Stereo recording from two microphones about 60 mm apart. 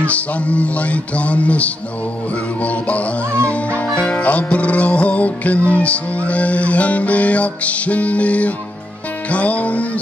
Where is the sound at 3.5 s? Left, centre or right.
Left.